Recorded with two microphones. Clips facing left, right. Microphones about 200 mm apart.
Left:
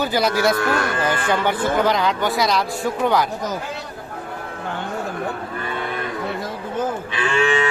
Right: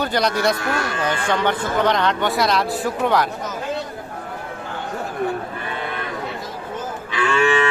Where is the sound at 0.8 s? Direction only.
55° left (ahead or behind).